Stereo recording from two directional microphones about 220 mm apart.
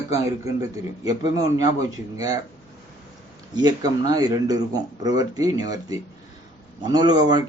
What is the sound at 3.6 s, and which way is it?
A man's voice, 20° right (ahead or behind).